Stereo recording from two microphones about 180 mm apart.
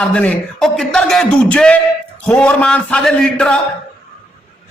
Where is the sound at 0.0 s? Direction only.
5° left (ahead or behind).